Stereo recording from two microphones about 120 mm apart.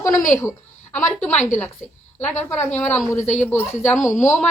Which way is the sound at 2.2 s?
15° left (ahead or behind).